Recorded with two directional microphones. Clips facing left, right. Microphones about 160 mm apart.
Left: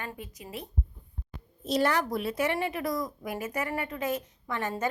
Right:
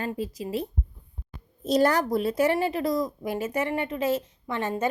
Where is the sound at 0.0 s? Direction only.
30° right (ahead or behind).